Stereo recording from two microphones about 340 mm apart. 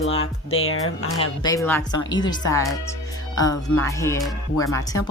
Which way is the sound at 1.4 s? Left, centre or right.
Centre.